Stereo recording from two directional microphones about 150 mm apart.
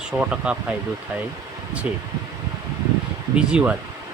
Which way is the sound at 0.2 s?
5° right (ahead or behind).